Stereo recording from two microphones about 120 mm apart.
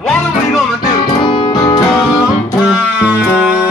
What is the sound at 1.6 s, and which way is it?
Music, 35° left (ahead or behind).